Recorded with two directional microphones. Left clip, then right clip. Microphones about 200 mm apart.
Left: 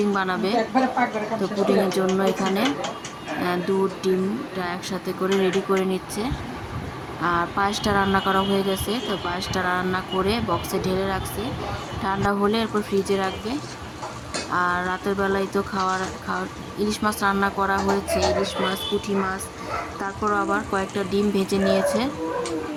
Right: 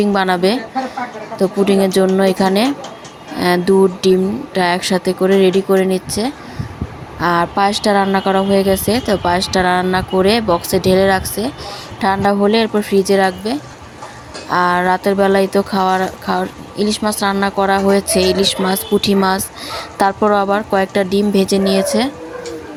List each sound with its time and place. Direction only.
0.1 s speech: 30° right (ahead or behind)